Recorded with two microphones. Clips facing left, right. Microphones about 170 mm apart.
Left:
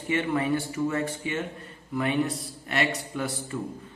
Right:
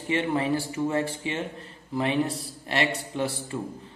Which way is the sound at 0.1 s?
30° right (ahead or behind).